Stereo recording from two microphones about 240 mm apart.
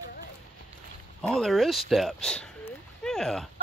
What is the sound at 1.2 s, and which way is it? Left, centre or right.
Speech, centre.